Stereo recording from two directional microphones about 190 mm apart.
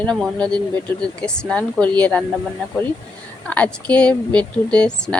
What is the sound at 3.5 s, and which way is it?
A woman's voice, 5° left (ahead or behind).